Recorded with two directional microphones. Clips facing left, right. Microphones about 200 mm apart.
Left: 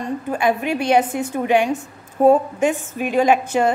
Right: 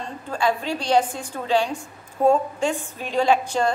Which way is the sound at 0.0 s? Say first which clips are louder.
Left 4 dB; 20° left (ahead or behind).